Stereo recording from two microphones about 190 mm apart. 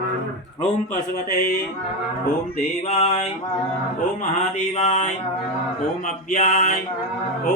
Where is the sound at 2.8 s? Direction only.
30° left (ahead or behind).